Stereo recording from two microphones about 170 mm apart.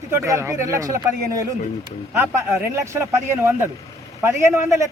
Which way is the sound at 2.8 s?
15° right (ahead or behind).